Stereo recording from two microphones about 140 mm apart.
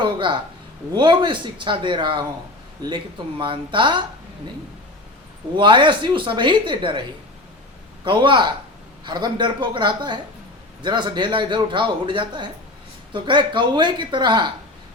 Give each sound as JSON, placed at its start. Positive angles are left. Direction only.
{"t": 0.0, "sound": "speech", "side_deg": -35}
{"t": 5.5, "sound": "speech", "side_deg": -35}
{"t": 8.0, "sound": "speech", "side_deg": -35}